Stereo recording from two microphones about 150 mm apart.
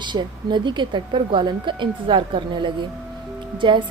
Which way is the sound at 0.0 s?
30° right (ahead or behind).